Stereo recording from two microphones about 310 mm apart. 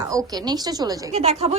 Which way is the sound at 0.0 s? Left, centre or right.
Centre.